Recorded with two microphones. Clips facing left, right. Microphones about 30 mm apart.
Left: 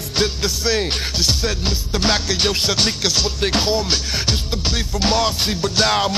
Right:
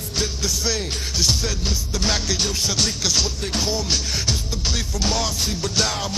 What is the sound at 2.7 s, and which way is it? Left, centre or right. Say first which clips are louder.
Music: left 4 dB; left.